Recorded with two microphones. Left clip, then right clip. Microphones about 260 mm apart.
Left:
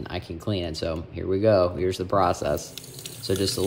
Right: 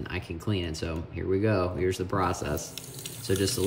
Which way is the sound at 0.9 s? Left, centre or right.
Centre.